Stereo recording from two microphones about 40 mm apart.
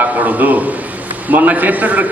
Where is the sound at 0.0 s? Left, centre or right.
Right.